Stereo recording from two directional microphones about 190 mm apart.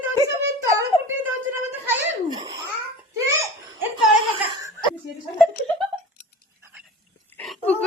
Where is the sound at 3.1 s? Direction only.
15° right (ahead or behind).